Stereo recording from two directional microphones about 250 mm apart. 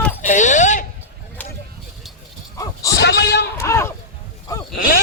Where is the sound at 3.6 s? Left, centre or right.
Centre.